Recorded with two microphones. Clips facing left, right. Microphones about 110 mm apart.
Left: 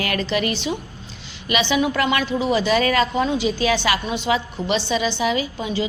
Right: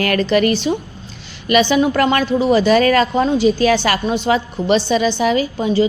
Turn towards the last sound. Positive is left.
turn(degrees=-40)  # may be behind; listen again after turning